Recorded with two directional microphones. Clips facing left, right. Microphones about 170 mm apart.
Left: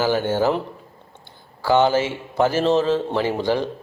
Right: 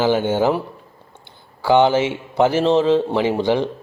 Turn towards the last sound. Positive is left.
turn(degrees=-20)  # may be behind; listen again after turning